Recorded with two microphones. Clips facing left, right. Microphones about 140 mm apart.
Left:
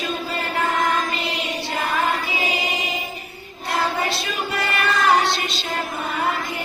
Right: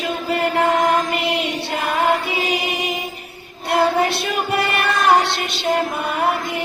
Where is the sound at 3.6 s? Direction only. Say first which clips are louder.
Right 6 dB; 65° right (ahead or behind).